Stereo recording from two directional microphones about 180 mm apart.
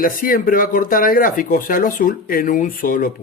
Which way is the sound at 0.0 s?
50° left (ahead or behind).